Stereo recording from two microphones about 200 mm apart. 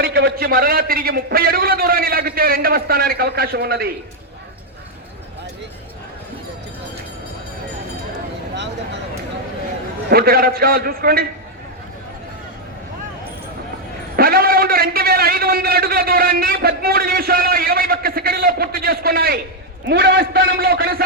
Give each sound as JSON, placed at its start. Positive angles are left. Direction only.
{"t": 0.0, "sound": "a man's voice", "side_deg": -50}
{"t": 10.1, "sound": "a man's voice", "side_deg": -50}
{"t": 14.2, "sound": "a man's voice", "side_deg": -50}